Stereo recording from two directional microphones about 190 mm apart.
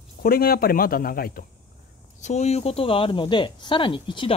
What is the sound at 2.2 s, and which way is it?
Speech, 35° left (ahead or behind).